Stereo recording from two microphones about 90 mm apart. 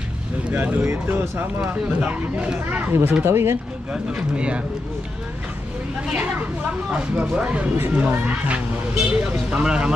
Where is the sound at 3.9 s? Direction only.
10° right (ahead or behind).